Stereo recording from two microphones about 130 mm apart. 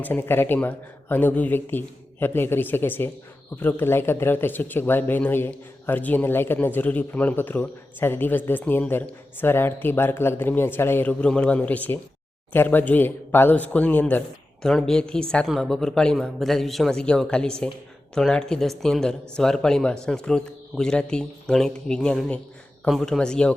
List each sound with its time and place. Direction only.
0.0 s speech: 15° left (ahead or behind)